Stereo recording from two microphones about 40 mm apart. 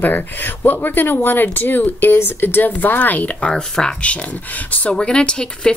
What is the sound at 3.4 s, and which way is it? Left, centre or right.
Speech, centre.